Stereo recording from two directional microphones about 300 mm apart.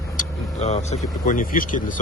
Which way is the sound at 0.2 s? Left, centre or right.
Left.